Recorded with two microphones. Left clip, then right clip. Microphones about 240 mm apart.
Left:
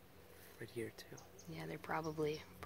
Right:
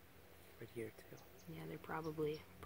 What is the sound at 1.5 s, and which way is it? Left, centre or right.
Speech, centre.